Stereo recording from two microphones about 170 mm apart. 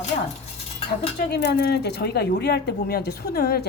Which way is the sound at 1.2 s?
75° left (ahead or behind).